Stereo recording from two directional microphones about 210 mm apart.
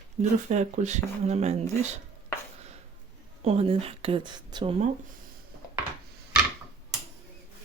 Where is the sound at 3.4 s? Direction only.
25° right (ahead or behind).